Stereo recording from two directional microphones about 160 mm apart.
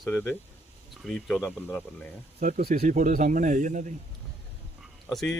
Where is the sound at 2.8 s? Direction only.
50° right (ahead or behind).